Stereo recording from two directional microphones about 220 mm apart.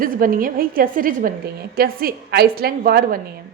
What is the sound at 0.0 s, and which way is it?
A woman's voice, 40° right (ahead or behind).